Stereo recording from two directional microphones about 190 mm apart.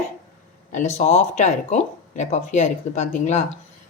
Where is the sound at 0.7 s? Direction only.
40° left (ahead or behind).